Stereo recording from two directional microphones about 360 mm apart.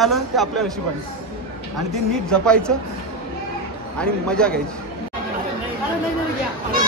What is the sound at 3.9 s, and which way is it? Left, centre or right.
Speech, centre.